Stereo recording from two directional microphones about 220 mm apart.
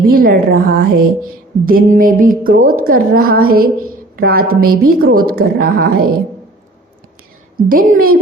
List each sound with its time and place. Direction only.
0.1 s a woman's voice: 40° right (ahead or behind)
7.5 s a woman's voice: 40° right (ahead or behind)